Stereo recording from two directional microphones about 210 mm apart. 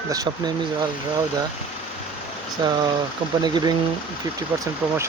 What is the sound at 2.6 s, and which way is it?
Speech, 20° right (ahead or behind).